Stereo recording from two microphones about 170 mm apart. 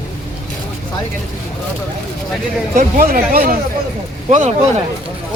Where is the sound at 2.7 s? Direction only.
60° right (ahead or behind).